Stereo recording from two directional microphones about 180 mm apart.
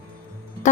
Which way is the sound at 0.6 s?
40° left (ahead or behind).